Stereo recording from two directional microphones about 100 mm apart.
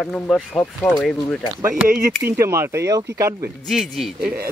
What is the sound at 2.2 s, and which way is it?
Speech, 30° right (ahead or behind).